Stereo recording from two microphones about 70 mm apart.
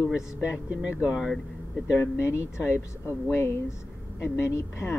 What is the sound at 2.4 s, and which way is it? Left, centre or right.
Speech, left.